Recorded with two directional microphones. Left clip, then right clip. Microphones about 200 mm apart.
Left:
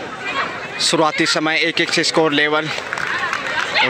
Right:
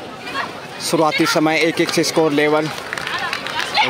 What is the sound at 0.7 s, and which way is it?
Speech, centre (ahead or behind).